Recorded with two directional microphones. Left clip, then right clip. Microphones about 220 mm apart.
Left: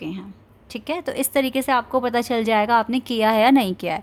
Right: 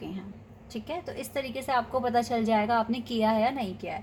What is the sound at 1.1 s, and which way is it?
A woman's voice, 40° left (ahead or behind).